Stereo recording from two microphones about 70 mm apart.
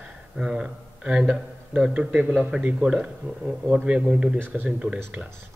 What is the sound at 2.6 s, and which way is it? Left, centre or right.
Speech, centre.